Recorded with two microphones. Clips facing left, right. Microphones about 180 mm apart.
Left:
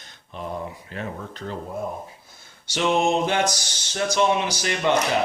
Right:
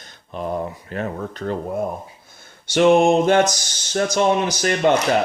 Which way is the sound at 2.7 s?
55° right (ahead or behind).